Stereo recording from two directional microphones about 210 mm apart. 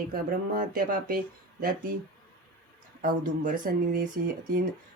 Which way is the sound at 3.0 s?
40° right (ahead or behind).